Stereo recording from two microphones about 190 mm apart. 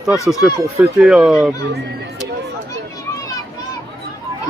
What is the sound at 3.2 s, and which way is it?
Children playing, 20° left (ahead or behind).